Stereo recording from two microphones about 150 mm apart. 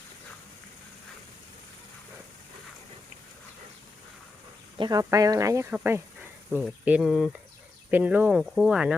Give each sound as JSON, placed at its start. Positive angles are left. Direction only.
{"t": 4.8, "sound": "speech", "side_deg": -25}